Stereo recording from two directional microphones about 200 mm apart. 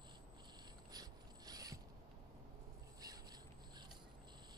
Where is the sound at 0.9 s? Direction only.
20° right (ahead or behind).